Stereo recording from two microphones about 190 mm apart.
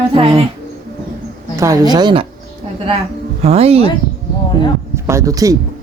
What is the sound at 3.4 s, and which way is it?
Speech, 30° right (ahead or behind).